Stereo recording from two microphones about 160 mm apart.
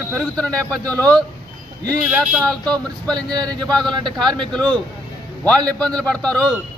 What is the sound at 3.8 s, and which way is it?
Speech, 30° right (ahead or behind).